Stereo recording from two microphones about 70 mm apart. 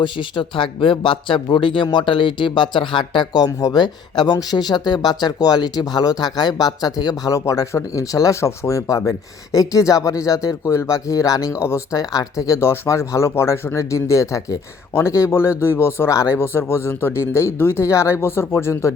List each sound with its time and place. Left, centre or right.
1.5 s speech: left
12.5 s speech: left
16.4 s speech: left